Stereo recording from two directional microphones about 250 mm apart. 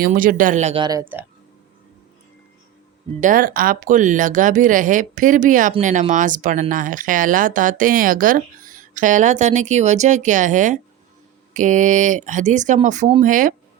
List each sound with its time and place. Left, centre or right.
0.0 s speech: right; by 1.2 s centre
3.2 s speech: right